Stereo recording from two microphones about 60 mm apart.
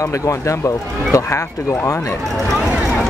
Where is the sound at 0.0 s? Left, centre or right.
Left.